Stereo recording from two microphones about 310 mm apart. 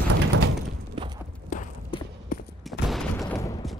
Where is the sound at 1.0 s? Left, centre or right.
Centre.